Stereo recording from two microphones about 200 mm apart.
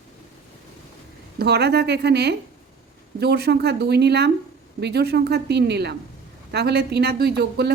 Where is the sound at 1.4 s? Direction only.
55° right (ahead or behind).